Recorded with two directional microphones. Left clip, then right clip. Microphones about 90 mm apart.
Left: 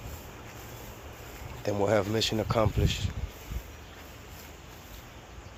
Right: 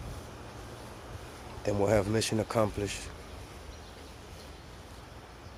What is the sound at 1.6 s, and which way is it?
Speech, 30° right (ahead or behind).